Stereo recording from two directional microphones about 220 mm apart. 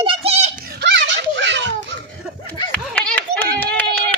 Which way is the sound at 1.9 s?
55° right (ahead or behind).